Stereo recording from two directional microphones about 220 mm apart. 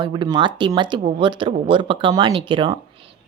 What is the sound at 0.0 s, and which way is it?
A woman's voice, 20° right (ahead or behind).